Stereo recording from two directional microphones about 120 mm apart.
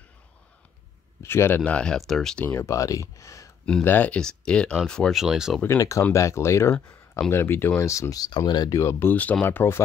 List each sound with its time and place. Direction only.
1.2 s speech: 20° left (ahead or behind)
1.6 s speech: 10° left (ahead or behind)
2.4 s speech: 20° left (ahead or behind)
3.8 s speech: 15° left (ahead or behind); by 5.6 s 5° right (ahead or behind)
5.8 s speech: 25° left (ahead or behind)